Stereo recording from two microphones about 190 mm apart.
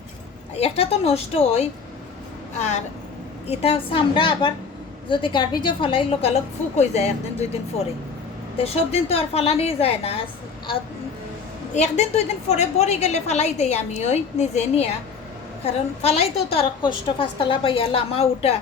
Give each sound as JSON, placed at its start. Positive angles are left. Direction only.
{"t": 0.5, "sound": "a woman's voice", "side_deg": 35}
{"t": 11.7, "sound": "a woman's voice", "side_deg": 35}